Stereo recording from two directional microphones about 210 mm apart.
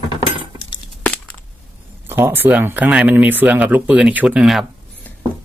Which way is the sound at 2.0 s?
10° right (ahead or behind).